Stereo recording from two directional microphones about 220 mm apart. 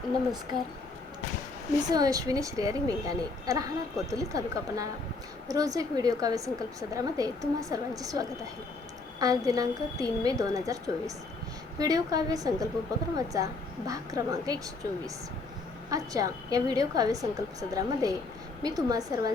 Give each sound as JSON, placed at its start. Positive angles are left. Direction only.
{"t": 1.9, "sound": "a woman's voice", "side_deg": -15}